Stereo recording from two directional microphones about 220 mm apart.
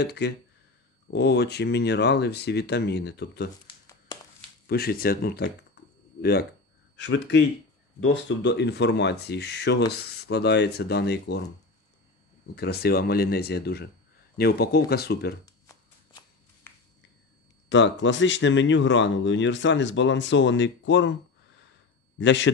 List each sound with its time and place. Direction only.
0.0 s speech: 50° left (ahead or behind)
3.6 s a sound: 15° left (ahead or behind)
4.6 s speech: 45° left (ahead or behind)
5.8 s computer keyboard: 50° left (ahead or behind)
7.0 s speech: 55° left (ahead or behind)
12.5 s speech: 45° left (ahead or behind)
15.7 s shuffling cards: 15° left (ahead or behind)
17.6 s speech: 55° left (ahead or behind)